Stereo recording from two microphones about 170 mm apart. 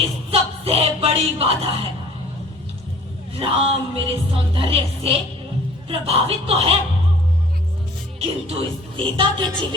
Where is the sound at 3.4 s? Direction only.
35° right (ahead or behind).